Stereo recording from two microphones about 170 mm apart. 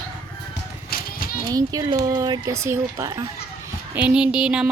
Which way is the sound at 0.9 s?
60° left (ahead or behind).